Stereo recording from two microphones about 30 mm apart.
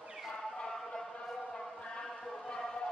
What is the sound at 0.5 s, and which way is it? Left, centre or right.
Chant, left.